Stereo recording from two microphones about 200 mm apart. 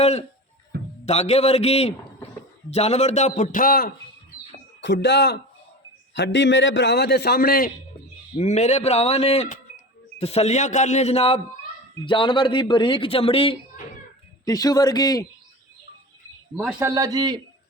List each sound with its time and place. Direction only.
0.0 s a man's voice: 30° left (ahead or behind); by 3.9 s 45° left (ahead or behind)
4.8 s a man's voice: 60° left (ahead or behind)
8.4 s a man's voice: 35° left (ahead or behind); by 15.3 s 20° left (ahead or behind)
16.6 s a man's voice: 5° right (ahead or behind)
16.9 s a man's voice: 20° right (ahead or behind)